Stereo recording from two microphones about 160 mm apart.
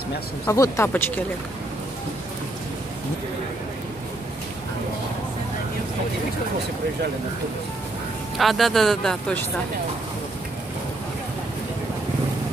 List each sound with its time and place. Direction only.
0.5 s speech: 15° left (ahead or behind)
8.4 s speech: centre (ahead or behind)